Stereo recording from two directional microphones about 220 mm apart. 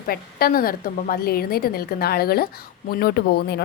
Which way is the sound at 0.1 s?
40° left (ahead or behind).